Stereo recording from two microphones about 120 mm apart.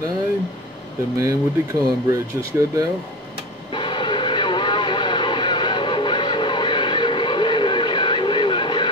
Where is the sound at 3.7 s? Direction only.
40° left (ahead or behind).